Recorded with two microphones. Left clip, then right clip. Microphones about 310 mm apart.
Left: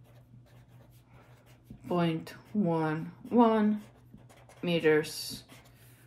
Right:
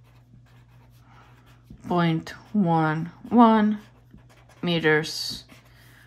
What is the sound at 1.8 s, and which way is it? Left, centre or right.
Speech, right.